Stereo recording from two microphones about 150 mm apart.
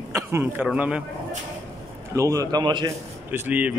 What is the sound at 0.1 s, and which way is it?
Speech, 15° right (ahead or behind).